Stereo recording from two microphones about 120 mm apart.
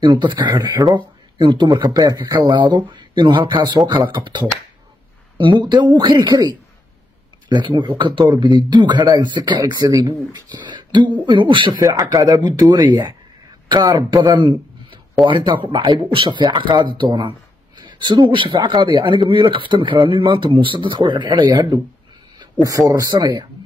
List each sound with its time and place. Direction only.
0.0 s speech: 40° right (ahead or behind)
11.8 s speech: 30° right (ahead or behind)